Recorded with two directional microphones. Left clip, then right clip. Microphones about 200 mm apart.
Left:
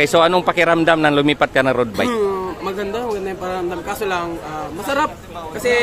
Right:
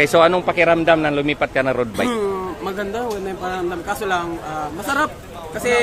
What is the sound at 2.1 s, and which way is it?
Speech, 5° right (ahead or behind).